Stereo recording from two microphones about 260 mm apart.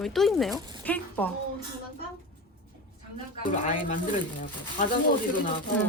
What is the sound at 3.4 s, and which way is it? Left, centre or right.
Speech, left.